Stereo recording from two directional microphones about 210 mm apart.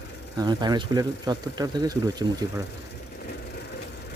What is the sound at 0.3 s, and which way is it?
Speech, 20° right (ahead or behind).